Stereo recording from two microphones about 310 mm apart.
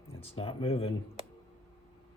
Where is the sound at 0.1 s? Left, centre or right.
Centre.